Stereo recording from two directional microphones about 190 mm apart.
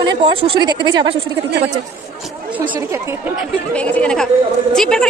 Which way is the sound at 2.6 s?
25° right (ahead or behind).